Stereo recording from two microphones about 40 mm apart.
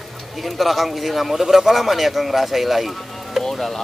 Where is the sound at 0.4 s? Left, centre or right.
Centre.